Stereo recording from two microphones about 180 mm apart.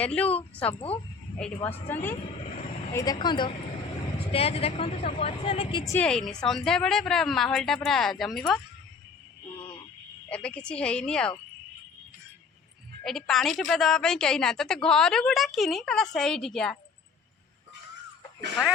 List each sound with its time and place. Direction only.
0.0 s speech: 5° left (ahead or behind)
0.6 s speech: 35° left (ahead or behind)
1.6 s speech: 10° left (ahead or behind); by 5.8 s 35° left (ahead or behind)
5.8 s speech: 15° left (ahead or behind)
6.1 s a woman's voice: 5° left (ahead or behind)
9.6 s a sound: 25° left (ahead or behind)
10.2 s a woman's voice: 5° left (ahead or behind)
13.1 s a woman's voice: centre (ahead or behind)